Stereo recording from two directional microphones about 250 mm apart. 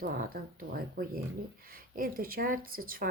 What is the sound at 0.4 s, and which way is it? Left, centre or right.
Speech, right.